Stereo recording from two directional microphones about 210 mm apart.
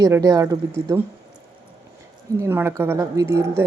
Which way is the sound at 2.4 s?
10° right (ahead or behind).